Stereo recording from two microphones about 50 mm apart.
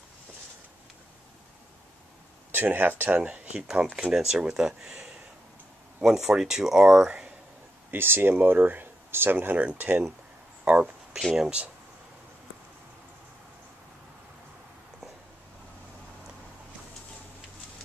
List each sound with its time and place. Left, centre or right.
2.5 s speech: right
3.2 s speech: right
6.0 s speech: centre
7.9 s speech: right
10.6 s a sound: right
11.3 s speech: centre